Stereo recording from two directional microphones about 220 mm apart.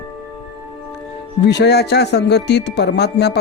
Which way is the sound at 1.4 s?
50° left (ahead or behind).